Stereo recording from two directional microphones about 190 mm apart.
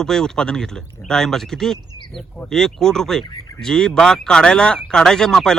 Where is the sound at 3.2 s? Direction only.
20° left (ahead or behind).